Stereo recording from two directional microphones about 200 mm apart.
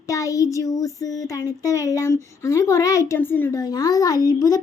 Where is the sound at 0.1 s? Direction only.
15° left (ahead or behind).